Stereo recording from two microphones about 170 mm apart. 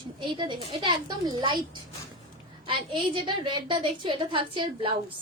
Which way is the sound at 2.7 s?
30° right (ahead or behind).